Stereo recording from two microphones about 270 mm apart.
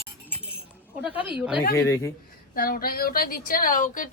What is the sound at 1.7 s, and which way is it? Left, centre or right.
Speech, centre.